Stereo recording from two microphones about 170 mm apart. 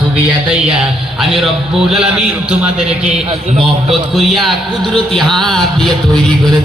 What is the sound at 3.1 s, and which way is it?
Speech, 35° right (ahead or behind).